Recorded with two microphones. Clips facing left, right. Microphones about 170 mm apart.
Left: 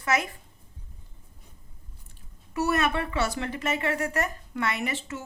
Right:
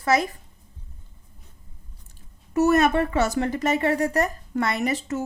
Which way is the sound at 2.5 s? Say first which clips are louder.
Right 7 dB; 45° right (ahead or behind).